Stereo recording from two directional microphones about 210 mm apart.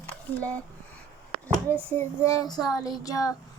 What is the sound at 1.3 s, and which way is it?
A child's voice, 10° left (ahead or behind).